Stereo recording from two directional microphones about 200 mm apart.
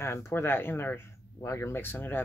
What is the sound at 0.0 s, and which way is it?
Speech, 15° left (ahead or behind).